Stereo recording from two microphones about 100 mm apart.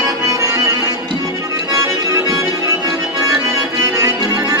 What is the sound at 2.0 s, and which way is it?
Accordion, 35° right (ahead or behind).